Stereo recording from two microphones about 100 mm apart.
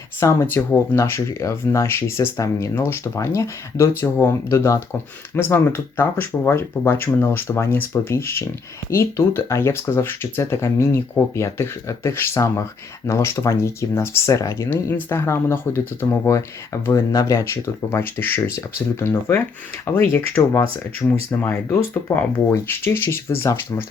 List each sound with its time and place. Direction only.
0.2 s speech: 30° left (ahead or behind)